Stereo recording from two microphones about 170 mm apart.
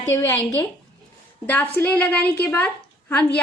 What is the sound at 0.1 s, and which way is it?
Speech, 15° left (ahead or behind).